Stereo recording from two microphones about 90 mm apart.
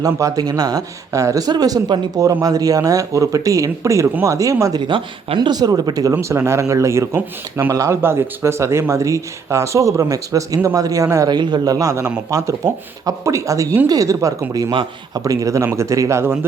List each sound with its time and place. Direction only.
0.0 s speech: 40° right (ahead or behind)
4.8 s speech: 70° right (ahead or behind); by 6.1 s 45° right (ahead or behind)
6.1 s speech: 30° right (ahead or behind)
11.3 s speech: 50° right (ahead or behind)
14.7 s a man's voice: 65° right (ahead or behind)
15.2 s speech: 40° right (ahead or behind)